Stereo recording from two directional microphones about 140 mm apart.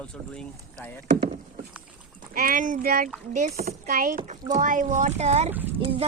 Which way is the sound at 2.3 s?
85° right.